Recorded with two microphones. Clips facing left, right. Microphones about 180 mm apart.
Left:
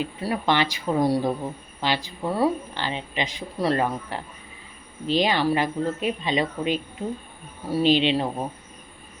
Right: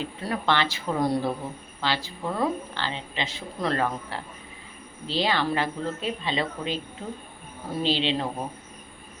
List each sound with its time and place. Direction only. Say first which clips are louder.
0.0 s a woman's voice: left 3 dB; 10° left (ahead or behind)